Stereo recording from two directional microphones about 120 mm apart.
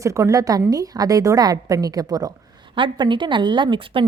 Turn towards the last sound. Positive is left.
turn(degrees=-45)  # may be behind; listen again after turning